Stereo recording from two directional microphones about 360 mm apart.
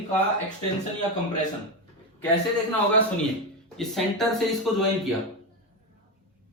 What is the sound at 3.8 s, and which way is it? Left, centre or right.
Speech, centre.